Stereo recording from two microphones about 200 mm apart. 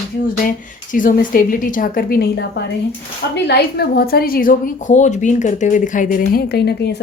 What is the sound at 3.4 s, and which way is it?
Speech, 55° left (ahead or behind).